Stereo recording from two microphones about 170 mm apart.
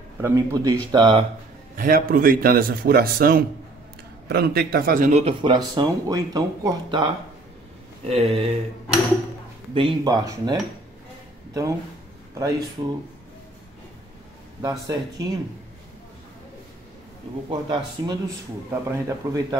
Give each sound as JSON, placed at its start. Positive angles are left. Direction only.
{"t": 0.2, "sound": "a man's voice", "side_deg": -15}
{"t": 1.8, "sound": "a man's voice", "side_deg": -60}
{"t": 5.1, "sound": "speech", "side_deg": -30}
{"t": 8.0, "sound": "speech", "side_deg": -35}
{"t": 9.8, "sound": "speech", "side_deg": -25}
{"t": 12.4, "sound": "speech", "side_deg": -20}
{"t": 14.6, "sound": "speech", "side_deg": -20}
{"t": 17.5, "sound": "a man's voice", "side_deg": -25}